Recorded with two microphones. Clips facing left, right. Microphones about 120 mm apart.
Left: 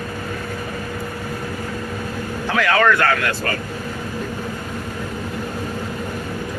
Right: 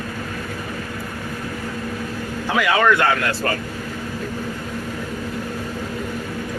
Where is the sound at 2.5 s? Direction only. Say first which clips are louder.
Even; 10° right (ahead or behind).